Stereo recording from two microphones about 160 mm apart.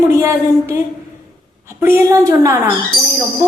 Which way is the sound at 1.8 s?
15° right (ahead or behind).